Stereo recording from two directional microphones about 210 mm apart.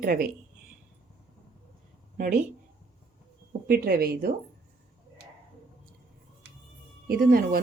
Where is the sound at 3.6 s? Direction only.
45° right (ahead or behind).